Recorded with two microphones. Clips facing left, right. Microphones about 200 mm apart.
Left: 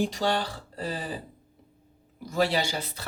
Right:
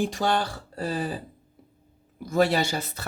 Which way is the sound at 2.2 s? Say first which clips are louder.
Right 3 dB; 50° right (ahead or behind).